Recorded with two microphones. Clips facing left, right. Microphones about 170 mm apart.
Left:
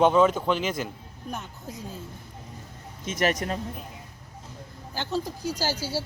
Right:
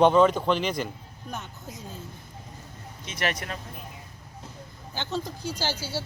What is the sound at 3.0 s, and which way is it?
Speech, 45° left (ahead or behind).